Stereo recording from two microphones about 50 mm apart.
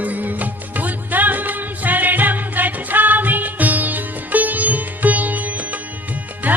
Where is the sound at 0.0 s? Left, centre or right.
Right.